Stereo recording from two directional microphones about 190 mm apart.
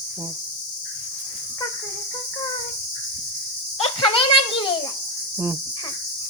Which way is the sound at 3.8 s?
30° left (ahead or behind).